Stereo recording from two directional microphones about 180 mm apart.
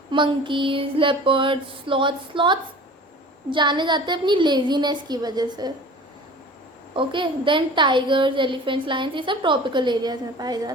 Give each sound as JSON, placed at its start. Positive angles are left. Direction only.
{"t": 0.1, "sound": "a woman's voice", "side_deg": -25}
{"t": 6.9, "sound": "a woman's voice", "side_deg": -25}